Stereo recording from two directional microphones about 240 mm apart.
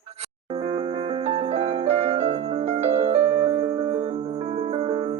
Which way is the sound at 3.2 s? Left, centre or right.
Centre.